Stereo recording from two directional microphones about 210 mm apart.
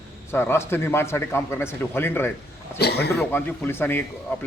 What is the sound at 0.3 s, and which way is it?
A man's voice, 10° left (ahead or behind).